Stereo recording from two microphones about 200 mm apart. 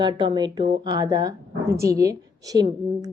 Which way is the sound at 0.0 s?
25° right (ahead or behind).